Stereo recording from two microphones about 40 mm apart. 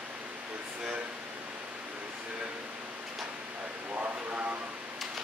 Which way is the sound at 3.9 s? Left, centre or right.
Right.